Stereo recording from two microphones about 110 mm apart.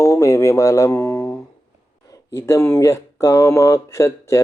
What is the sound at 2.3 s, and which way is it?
Speech, 25° left (ahead or behind).